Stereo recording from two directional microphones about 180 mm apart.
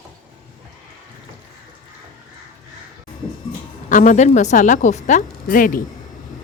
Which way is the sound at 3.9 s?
45° left (ahead or behind).